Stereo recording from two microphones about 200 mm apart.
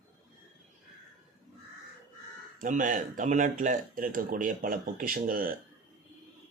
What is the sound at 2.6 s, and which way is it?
Speech, 40° right (ahead or behind).